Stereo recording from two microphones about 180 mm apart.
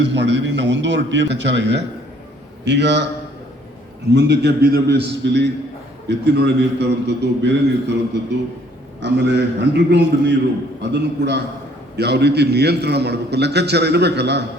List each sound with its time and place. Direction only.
0.0 s a man's voice: 75° right (ahead or behind)
4.1 s a man's voice: 70° right (ahead or behind)